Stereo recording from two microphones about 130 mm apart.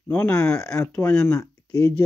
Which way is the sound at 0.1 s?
15° left (ahead or behind).